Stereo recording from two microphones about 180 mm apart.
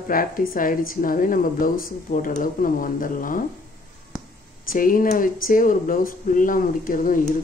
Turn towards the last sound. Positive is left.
turn(degrees=50)  # may be behind; listen again after turning